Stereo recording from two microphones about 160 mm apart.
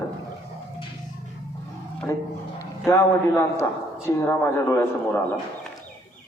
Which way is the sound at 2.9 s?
15° left (ahead or behind).